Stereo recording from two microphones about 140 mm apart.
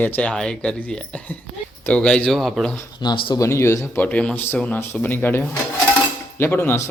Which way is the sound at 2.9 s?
35° left (ahead or behind).